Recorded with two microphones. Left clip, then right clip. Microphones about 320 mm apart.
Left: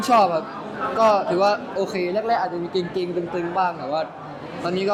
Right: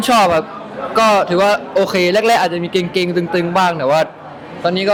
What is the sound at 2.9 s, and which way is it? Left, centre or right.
A man's voice, right.